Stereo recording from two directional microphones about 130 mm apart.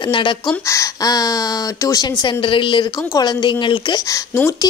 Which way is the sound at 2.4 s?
40° left (ahead or behind).